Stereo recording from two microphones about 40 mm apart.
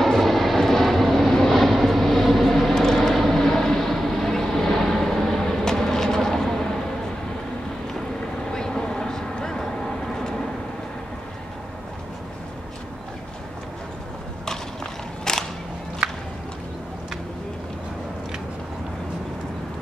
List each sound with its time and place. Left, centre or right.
0.0 s vehicle: centre
8.5 s vehicle: centre
14.4 s a sound: centre